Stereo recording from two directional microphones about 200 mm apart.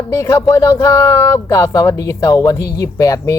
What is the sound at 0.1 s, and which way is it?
Speech, 15° left (ahead or behind).